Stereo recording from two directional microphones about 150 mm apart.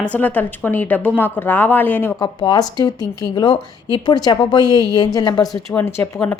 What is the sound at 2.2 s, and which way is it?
Speech, 25° left (ahead or behind).